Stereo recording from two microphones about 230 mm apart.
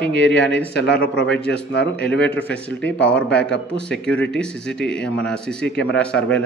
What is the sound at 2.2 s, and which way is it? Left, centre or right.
Speech, centre.